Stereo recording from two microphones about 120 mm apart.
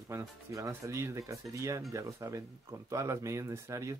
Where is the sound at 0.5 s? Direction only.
25° right (ahead or behind).